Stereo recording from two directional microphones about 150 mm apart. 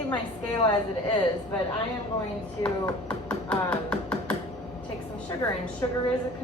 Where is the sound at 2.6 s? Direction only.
5° left (ahead or behind).